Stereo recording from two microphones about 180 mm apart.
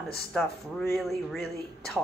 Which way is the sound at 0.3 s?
Centre (ahead or behind).